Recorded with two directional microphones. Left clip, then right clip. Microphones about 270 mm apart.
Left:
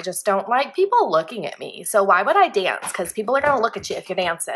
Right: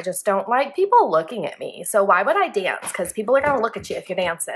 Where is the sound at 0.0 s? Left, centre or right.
Centre.